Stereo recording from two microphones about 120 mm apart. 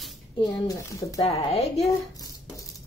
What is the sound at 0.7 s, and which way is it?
Speech, 30° left (ahead or behind).